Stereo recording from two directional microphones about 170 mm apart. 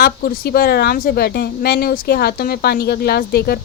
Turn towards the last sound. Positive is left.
turn(degrees=65)  # may be behind; listen again after turning